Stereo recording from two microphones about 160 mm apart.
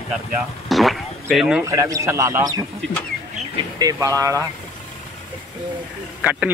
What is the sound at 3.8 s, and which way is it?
Speech, 20° right (ahead or behind).